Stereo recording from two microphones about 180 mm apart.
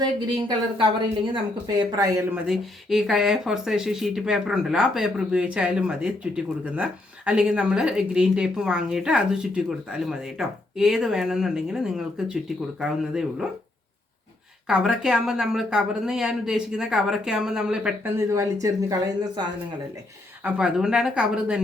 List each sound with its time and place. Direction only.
0.0 s speech: 25° right (ahead or behind)
2.3 s speech: 5° right (ahead or behind)
14.7 s speech: 5° right (ahead or behind)
18.2 s speech: 15° right (ahead or behind)
20.4 s speech: 5° right (ahead or behind)